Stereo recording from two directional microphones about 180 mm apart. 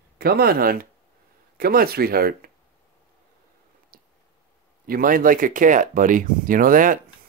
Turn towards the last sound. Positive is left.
turn(degrees=-50)  # may be behind; listen again after turning